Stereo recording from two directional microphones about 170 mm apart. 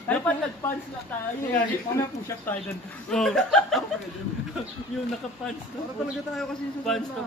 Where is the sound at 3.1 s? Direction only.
Centre (ahead or behind).